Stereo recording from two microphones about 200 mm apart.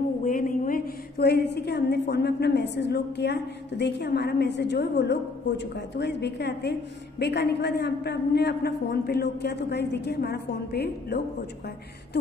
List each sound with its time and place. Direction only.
0.2 s a woman's voice: 40° left (ahead or behind)